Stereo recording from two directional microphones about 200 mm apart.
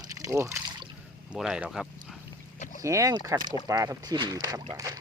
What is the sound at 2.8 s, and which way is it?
Speech, 15° right (ahead or behind).